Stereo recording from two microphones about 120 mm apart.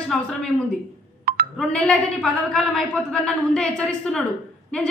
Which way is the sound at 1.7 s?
10° left (ahead or behind).